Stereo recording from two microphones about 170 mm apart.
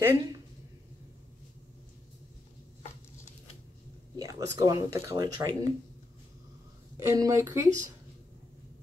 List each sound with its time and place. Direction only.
0.0 s a woman's voice: 15° right (ahead or behind)
4.2 s speech: 20° right (ahead or behind)
7.0 s speech: 20° right (ahead or behind)